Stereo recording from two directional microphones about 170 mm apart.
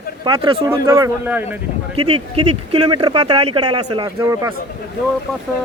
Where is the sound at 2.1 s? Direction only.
35° right (ahead or behind); by 4.5 s 20° right (ahead or behind).